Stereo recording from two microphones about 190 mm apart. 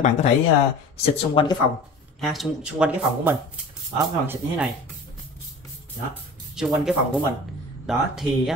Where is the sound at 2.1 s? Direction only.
Centre (ahead or behind).